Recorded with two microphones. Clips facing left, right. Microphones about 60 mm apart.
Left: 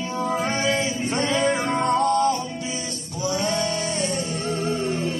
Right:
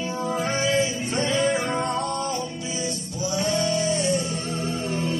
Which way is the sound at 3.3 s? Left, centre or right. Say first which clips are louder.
Right 1 dB; left.